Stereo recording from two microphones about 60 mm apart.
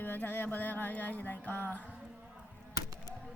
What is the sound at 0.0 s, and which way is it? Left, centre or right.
Music, left.